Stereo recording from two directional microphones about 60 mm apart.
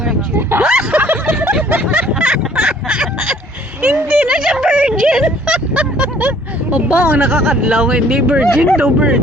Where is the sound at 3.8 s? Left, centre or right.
Right.